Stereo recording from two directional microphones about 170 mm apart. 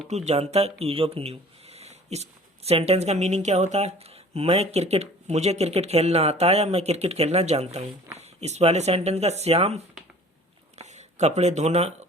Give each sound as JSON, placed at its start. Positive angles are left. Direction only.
{"t": 0.1, "sound": "speech", "side_deg": -40}